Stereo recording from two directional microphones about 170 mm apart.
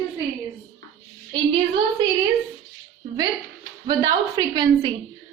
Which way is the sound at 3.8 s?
20° right (ahead or behind).